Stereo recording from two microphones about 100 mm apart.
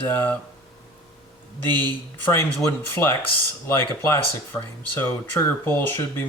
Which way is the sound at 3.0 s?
20° left (ahead or behind).